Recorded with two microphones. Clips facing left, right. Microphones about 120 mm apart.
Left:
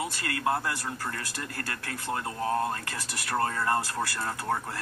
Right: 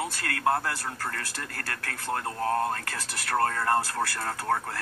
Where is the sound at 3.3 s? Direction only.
15° left (ahead or behind).